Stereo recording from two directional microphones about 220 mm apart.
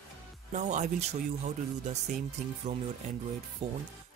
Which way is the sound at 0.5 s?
35° right (ahead or behind).